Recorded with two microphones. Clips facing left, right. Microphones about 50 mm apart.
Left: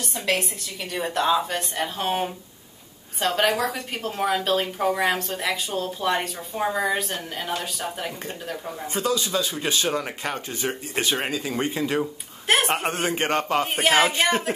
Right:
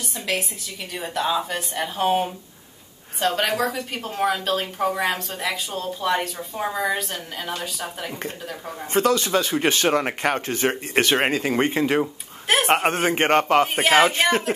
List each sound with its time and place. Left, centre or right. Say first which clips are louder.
0.1 s a woman's voice: left 2 dB; centre
8.9 s a man's voice: right 5 dB; right
13.8 s a woman's voice: left 1 dB; centre